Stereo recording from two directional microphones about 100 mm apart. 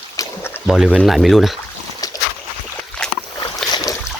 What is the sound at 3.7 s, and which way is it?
Boat, 35° left (ahead or behind).